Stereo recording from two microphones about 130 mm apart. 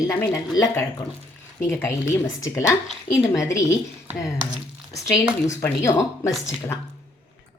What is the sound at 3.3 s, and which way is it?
Speech, 25° left (ahead or behind).